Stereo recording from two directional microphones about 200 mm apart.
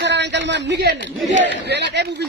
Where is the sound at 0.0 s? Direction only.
60° right (ahead or behind).